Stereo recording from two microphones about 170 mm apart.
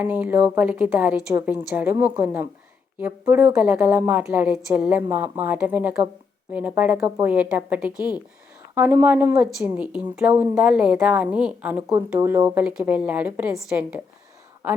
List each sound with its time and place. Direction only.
0.0 s a woman's voice: 10° right (ahead or behind)